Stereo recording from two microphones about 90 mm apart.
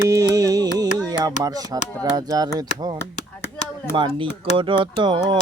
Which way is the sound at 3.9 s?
70° right (ahead or behind).